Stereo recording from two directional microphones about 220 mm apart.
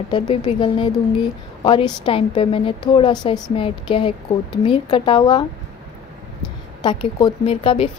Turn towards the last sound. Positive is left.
turn(degrees=25)  # may be behind; listen again after turning